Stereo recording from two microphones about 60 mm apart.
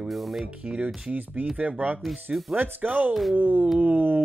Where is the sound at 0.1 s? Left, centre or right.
Centre.